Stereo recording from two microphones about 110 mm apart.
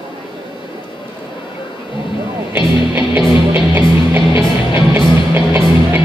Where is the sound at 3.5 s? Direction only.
15° right (ahead or behind).